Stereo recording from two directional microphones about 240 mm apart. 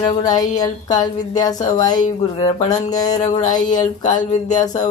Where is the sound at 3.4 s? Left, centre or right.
Left.